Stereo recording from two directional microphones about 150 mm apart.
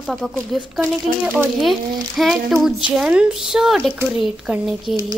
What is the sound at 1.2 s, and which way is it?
Speech, 10° right (ahead or behind).